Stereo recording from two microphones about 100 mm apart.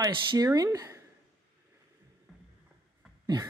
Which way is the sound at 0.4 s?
30° right (ahead or behind).